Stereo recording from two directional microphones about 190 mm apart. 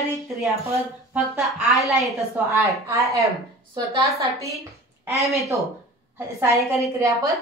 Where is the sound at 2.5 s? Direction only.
15° right (ahead or behind).